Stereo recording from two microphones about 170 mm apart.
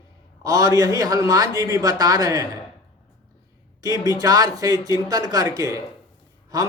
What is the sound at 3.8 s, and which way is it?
A man's voice, 20° right (ahead or behind).